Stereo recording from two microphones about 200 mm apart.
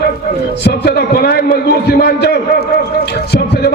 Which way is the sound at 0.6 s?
55° left (ahead or behind).